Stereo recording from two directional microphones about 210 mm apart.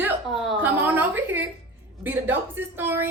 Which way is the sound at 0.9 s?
10° right (ahead or behind).